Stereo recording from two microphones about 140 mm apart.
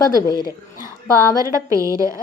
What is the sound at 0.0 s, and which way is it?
Speech, 30° left (ahead or behind).